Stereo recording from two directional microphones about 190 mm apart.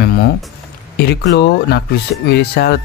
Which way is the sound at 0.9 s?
65° left (ahead or behind).